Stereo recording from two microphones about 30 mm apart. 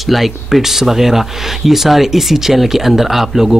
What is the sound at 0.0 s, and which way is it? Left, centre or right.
Speech, centre.